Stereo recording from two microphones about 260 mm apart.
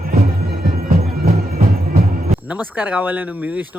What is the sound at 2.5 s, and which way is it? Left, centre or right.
Speech, centre.